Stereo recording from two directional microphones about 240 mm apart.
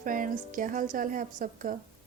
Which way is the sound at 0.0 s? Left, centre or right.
Right.